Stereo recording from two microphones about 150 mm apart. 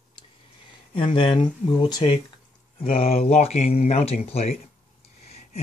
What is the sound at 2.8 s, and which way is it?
Speech, 40° left (ahead or behind).